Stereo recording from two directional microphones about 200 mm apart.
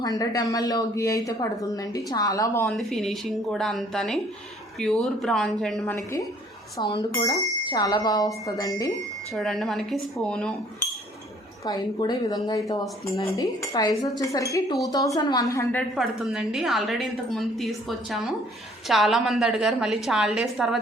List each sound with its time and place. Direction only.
0.2 s speech: 15° left (ahead or behind)
2.6 s a woman's voice: centre (ahead or behind)
7.1 s speech: 20° left (ahead or behind)
9.3 s a woman's voice: centre (ahead or behind)
11.6 s speech: 20° left (ahead or behind)
16.0 s a woman's voice: centre (ahead or behind)